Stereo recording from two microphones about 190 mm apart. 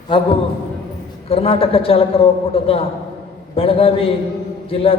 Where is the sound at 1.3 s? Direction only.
30° left (ahead or behind).